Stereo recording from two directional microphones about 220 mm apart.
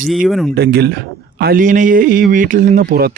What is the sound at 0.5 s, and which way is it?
Speech, 45° right (ahead or behind).